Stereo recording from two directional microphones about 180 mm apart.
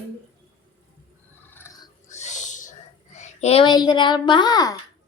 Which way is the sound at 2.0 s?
40° left (ahead or behind).